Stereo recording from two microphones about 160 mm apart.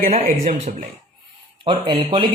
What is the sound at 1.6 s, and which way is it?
Speech, 30° right (ahead or behind).